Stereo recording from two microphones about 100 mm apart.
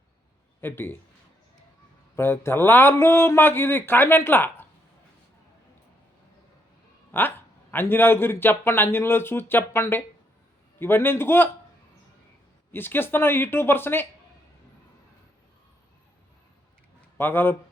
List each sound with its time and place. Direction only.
0.6 s a man's voice: 20° left (ahead or behind)
2.1 s a man's voice: 25° left (ahead or behind)
7.1 s a man's voice: 20° left (ahead or behind)
12.7 s a man's voice: 20° left (ahead or behind)
17.2 s a man's voice: 20° left (ahead or behind)